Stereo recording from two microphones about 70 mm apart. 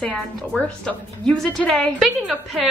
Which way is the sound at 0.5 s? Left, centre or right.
Centre.